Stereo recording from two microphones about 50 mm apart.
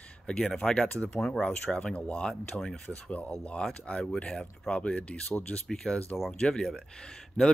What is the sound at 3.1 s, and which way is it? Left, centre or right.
Speech, left.